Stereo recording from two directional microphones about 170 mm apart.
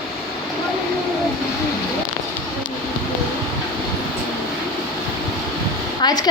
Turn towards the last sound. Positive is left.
turn(degrees=25)  # may be behind; listen again after turning